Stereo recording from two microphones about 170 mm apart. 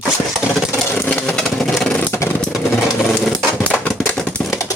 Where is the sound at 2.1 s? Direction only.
15° left (ahead or behind).